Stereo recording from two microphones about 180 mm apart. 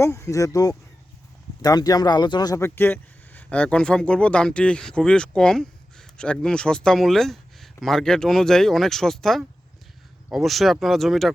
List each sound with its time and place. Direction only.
0.0 s speech: 15° left (ahead or behind)